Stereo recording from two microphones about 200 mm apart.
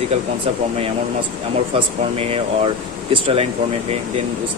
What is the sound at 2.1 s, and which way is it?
Speech, 30° right (ahead or behind).